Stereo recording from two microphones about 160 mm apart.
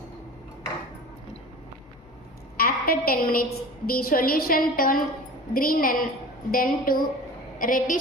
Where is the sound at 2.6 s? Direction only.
65° left (ahead or behind).